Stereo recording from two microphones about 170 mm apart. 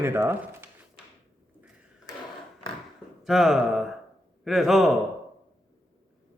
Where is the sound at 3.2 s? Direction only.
Centre (ahead or behind).